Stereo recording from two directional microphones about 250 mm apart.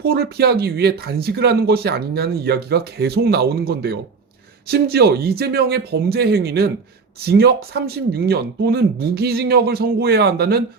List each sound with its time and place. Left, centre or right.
0.0 s speech: right